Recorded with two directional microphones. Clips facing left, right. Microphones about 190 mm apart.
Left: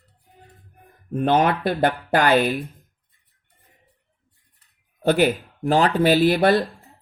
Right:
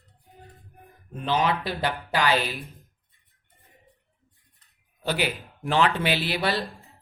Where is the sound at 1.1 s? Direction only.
55° left (ahead or behind).